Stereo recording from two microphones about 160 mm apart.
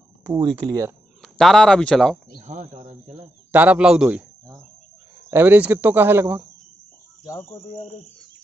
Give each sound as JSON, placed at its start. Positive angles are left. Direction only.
{"t": 0.3, "sound": "speech", "side_deg": -25}
{"t": 1.2, "sound": "speech", "side_deg": 0}
{"t": 2.3, "sound": "speech", "side_deg": -50}
{"t": 3.5, "sound": "a man's voice", "side_deg": -10}
{"t": 5.3, "sound": "speech", "side_deg": -10}
{"t": 7.2, "sound": "speech", "side_deg": 20}
{"t": 7.7, "sound": "speech", "side_deg": 40}